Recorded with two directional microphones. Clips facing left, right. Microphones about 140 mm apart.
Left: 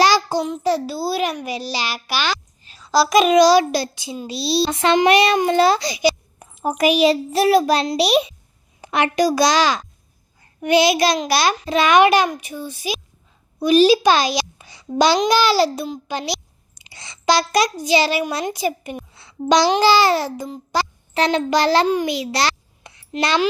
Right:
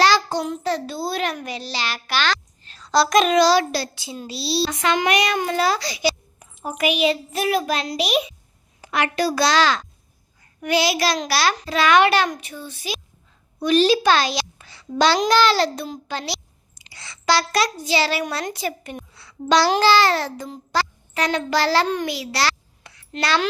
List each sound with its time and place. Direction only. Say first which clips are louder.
0.0 s child singing: left 2 dB; 10° left (ahead or behind)
0.6 s a child's voice: left 4 dB; 10° left (ahead or behind)
4.7 s a child's voice: left 7 dB; 30° left (ahead or behind)
6.4 s a child's voice: left 5 dB; 45° left (ahead or behind)
8.8 s a child's voice: left 4 dB; 20° left (ahead or behind)
13.6 s a sound: left 4 dB; 10° left (ahead or behind)
14.9 s a child's voice: left 2 dB; 15° left (ahead or behind)
19.1 s a sound: left 2 dB; 25° left (ahead or behind)
19.8 s a child's voice: left 2 dB; 15° left (ahead or behind)
21.1 s a child's voice: left 5 dB; 25° left (ahead or behind)
22.1 s a sound: left 3 dB; 20° left (ahead or behind)